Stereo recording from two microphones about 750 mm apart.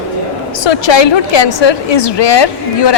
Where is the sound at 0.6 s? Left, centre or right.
Left.